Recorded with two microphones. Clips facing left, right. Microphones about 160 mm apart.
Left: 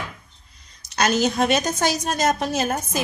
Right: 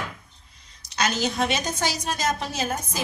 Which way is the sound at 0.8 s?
45° left (ahead or behind).